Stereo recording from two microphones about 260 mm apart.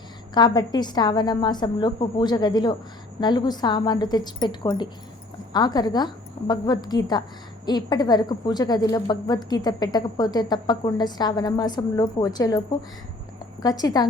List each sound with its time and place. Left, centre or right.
0.3 s a woman's voice: centre